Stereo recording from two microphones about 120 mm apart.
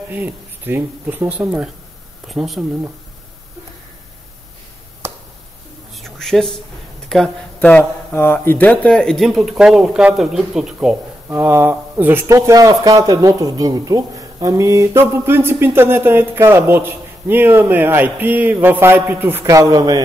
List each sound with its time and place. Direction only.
0.1 s speech: 15° right (ahead or behind)
5.0 s a sound: 25° right (ahead or behind)
5.9 s a sound: centre (ahead or behind)
7.1 s speech: 5° left (ahead or behind)
7.6 s speech: 15° left (ahead or behind); by 11.0 s 5° right (ahead or behind)
11.2 s speech: 20° right (ahead or behind)